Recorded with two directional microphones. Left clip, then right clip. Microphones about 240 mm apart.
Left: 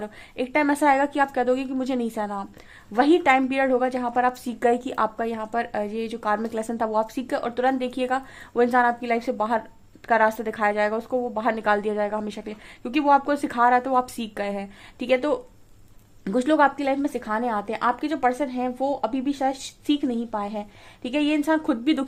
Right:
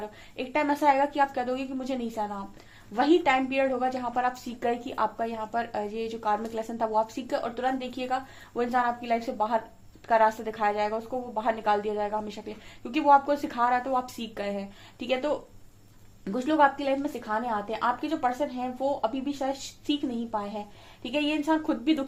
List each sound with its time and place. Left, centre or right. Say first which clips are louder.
0.0 s a woman's voice: left 6 dB; left